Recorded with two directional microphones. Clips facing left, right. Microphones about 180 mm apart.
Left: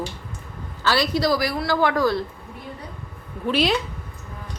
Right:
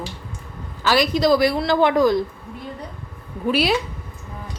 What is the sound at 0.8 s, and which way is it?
A woman's voice, 15° right (ahead or behind).